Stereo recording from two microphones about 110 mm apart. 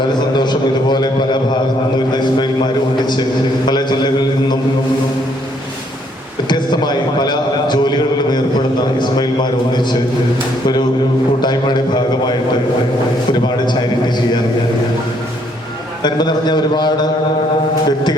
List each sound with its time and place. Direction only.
0.2 s a man's voice: 45° left (ahead or behind)
6.5 s a man's voice: 40° left (ahead or behind)
11.3 s a man's voice: 40° left (ahead or behind)
16.0 s a man's voice: 40° left (ahead or behind)